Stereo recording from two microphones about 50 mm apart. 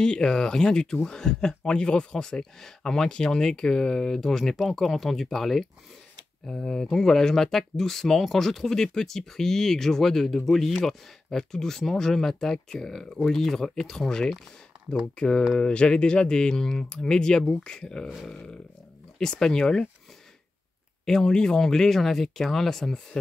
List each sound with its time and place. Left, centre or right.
0.0 s speech: centre
21.0 s speech: centre